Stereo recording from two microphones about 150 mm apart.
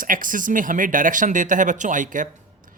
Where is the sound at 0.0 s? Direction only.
65° right (ahead or behind).